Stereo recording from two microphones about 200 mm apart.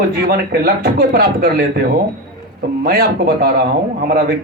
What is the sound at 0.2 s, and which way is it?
A man's voice, 50° right (ahead or behind).